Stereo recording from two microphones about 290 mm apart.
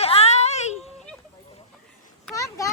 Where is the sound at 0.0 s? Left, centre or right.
Left.